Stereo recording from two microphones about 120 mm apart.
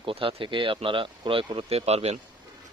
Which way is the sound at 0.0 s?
45° right (ahead or behind).